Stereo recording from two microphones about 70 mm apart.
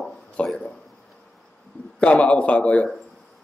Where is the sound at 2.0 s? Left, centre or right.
Centre.